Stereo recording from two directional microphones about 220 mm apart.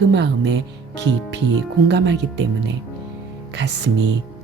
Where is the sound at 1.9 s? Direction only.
50° right (ahead or behind).